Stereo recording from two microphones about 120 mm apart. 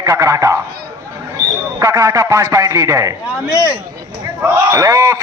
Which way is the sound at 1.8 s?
25° right (ahead or behind).